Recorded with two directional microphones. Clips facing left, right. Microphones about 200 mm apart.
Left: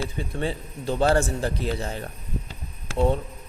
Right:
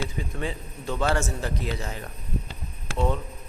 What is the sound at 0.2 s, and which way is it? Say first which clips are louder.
A man's voice: left 3 dB; 35° left (ahead or behind).